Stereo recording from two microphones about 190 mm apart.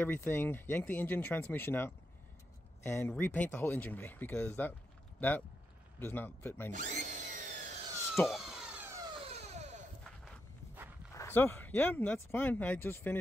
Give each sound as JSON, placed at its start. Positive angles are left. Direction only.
{"t": 0.0, "sound": "speech", "side_deg": 10}
{"t": 5.9, "sound": "speech", "side_deg": 10}
{"t": 6.7, "sound": "tools", "side_deg": -40}
{"t": 8.3, "sound": "police car", "side_deg": 0}
{"t": 9.2, "sound": "a sound", "side_deg": -35}
{"t": 10.0, "sound": "a sound", "side_deg": 5}
{"t": 11.1, "sound": "speech", "side_deg": 10}